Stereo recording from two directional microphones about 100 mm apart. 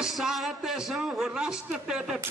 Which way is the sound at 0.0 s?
5° right (ahead or behind).